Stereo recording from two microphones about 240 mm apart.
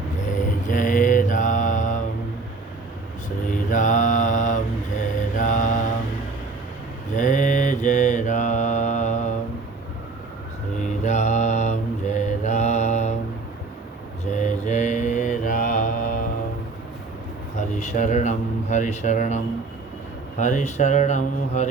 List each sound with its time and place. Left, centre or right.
0.7 s mantra: left
3.2 s mantra: left
7.2 s mantra: left
10.8 s mantra: left
14.3 s mantra: left
17.7 s a sound: left
20.4 s speech: left